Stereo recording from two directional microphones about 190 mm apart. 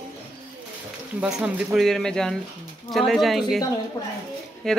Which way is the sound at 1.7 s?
Centre (ahead or behind).